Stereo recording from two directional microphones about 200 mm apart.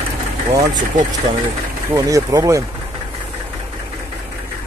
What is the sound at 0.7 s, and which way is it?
Speech, 40° right (ahead or behind).